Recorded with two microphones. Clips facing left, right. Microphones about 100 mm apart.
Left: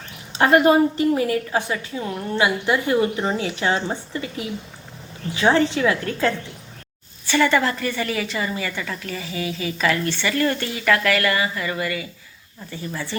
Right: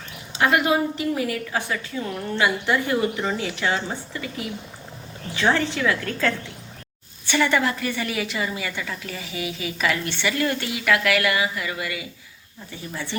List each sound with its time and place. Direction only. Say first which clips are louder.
0.3 s a woman's voice: left 5 dB; 40° left (ahead or behind); by 2.7 s 15° left (ahead or behind)
2.7 s a woman's voice: left 3 dB; 25° left (ahead or behind)
7.3 s a woman's voice: left 2 dB; 15° right (ahead or behind)